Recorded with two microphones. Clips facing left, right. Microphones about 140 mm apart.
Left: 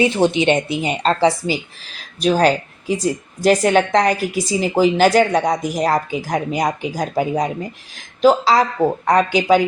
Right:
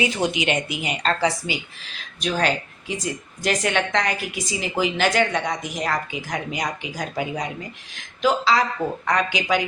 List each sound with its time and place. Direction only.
0.0 s speech: 30° left (ahead or behind)